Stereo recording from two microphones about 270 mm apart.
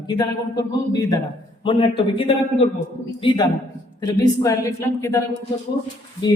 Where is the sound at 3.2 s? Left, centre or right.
Centre.